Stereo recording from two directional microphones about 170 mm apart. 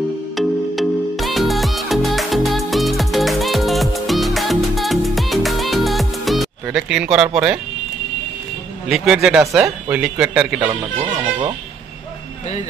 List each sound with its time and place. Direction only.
0.4 s music: centre (ahead or behind)
8.8 s a man's voice: centre (ahead or behind)
10.7 s speech: 25° right (ahead or behind)